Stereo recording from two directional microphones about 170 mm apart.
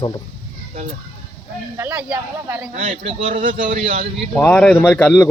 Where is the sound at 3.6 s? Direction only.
50° right (ahead or behind).